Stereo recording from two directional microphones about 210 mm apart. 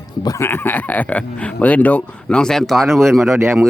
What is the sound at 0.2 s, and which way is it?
Speech, 15° left (ahead or behind).